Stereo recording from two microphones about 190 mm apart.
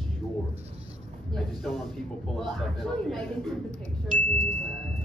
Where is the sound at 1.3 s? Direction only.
Centre (ahead or behind).